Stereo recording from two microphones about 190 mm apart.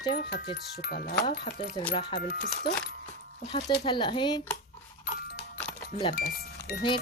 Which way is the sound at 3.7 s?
30° left (ahead or behind).